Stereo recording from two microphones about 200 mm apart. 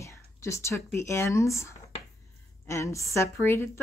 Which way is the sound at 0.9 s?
10° left (ahead or behind).